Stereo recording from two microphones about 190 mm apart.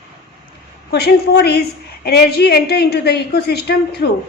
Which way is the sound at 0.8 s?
60° left (ahead or behind).